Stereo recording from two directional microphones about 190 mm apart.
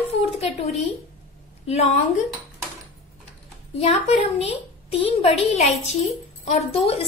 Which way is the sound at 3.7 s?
35° left (ahead or behind).